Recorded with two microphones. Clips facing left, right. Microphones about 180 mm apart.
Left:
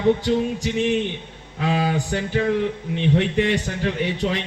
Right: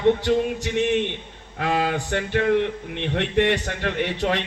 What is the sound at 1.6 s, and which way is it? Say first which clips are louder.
A man's voice: left 1 dB; 65° right (ahead or behind).